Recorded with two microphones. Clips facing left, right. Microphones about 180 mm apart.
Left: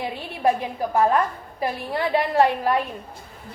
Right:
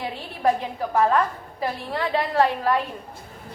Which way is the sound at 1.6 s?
15° left (ahead or behind).